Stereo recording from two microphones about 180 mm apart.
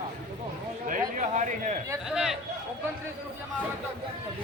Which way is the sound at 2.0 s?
5° right (ahead or behind).